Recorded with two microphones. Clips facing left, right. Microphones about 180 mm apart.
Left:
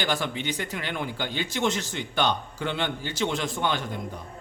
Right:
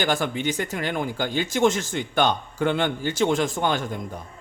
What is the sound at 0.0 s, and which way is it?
Speech, 50° right (ahead or behind).